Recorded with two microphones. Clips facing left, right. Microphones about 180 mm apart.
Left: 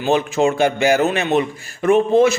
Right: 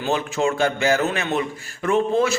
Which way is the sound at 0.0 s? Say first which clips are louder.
Left 5 dB; 20° left (ahead or behind).